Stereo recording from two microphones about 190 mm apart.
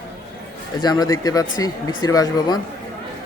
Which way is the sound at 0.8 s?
20° left (ahead or behind).